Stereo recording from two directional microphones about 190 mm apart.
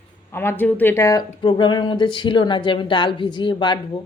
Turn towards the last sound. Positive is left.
turn(degrees=25)  # may be behind; listen again after turning